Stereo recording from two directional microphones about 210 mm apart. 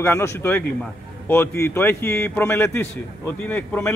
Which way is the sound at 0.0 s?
10° left (ahead or behind).